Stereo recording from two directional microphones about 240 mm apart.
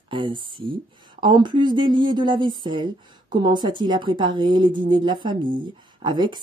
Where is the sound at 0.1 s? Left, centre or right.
Centre.